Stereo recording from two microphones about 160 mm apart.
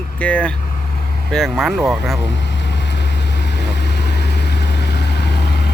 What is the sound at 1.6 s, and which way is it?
Speech, centre (ahead or behind).